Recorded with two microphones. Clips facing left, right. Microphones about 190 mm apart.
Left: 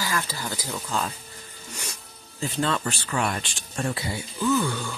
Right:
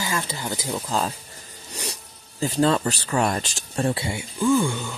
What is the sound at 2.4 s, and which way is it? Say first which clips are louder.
Speech: right 6 dB; 35° right (ahead or behind).